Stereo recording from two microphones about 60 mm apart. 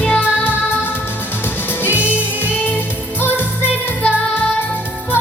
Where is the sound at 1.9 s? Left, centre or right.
Right.